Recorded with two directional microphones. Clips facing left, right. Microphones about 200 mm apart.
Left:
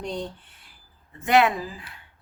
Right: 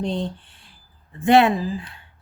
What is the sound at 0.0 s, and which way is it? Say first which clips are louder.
A woman's voice: right 6 dB; 30° right (ahead or behind).